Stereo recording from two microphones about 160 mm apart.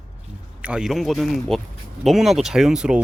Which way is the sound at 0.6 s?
5° right (ahead or behind).